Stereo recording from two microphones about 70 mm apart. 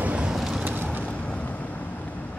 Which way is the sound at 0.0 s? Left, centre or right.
Centre.